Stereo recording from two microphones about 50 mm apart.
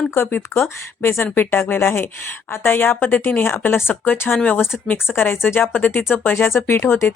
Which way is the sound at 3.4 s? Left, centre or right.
Left.